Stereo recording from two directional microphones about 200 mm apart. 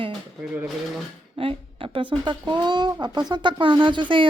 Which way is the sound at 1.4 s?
25° right (ahead or behind).